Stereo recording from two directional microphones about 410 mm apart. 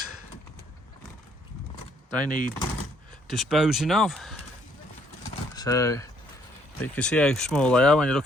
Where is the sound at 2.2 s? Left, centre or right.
Centre.